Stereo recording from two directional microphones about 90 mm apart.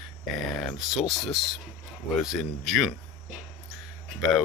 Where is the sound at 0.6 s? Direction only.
Centre (ahead or behind).